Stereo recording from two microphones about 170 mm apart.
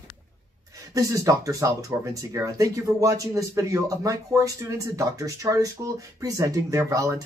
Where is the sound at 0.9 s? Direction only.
20° right (ahead or behind).